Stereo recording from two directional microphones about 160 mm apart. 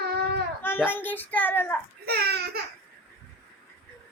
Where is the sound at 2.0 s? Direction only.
80° right.